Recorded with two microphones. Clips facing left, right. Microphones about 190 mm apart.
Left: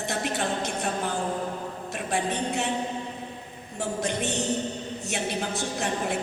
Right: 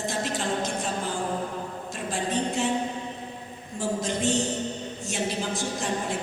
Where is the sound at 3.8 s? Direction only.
60° left (ahead or behind).